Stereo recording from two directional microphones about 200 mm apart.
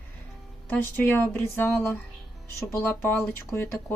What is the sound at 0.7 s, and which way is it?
Speech, 10° left (ahead or behind).